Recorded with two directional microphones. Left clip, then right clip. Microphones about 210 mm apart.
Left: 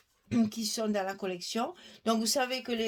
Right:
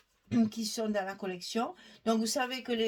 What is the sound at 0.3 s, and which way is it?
Speech, 35° left (ahead or behind).